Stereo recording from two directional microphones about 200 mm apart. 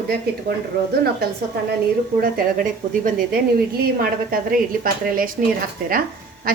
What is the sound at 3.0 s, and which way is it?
A woman's voice, 50° right (ahead or behind).